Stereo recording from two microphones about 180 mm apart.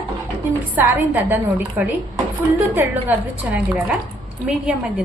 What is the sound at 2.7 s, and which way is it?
A woman's voice, 10° right (ahead or behind).